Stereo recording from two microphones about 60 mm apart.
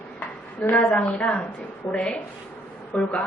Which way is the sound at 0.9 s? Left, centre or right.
Centre.